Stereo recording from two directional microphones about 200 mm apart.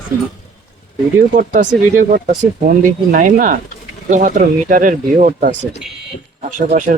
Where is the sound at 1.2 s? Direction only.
40° right (ahead or behind).